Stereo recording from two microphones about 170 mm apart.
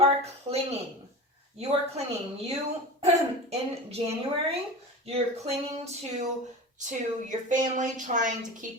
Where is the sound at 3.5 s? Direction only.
35° right (ahead or behind).